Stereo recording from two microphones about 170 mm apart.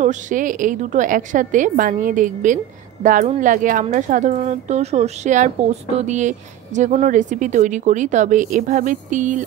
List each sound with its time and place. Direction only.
0.0 s speech: 45° right (ahead or behind)